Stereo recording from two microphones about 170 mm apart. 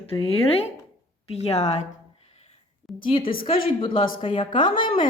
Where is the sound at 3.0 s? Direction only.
30° left (ahead or behind).